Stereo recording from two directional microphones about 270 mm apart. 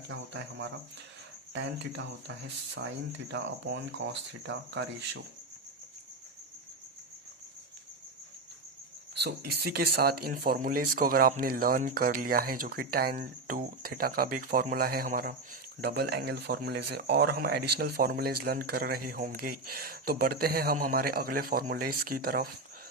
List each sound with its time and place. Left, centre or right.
0.1 s speech: right
9.5 s speech: right